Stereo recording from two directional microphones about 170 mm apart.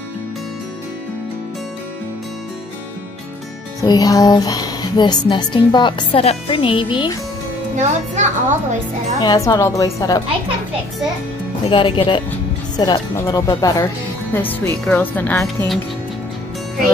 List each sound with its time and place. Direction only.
3.8 s speech: 25° left (ahead or behind)
7.7 s a woman's voice: 45° right (ahead or behind)
9.2 s speech: 25° left (ahead or behind)
11.7 s speech: 30° left (ahead or behind)
14.3 s speech: 10° left (ahead or behind)